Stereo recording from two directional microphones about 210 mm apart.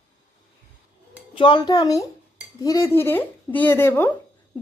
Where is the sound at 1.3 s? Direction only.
25° left (ahead or behind).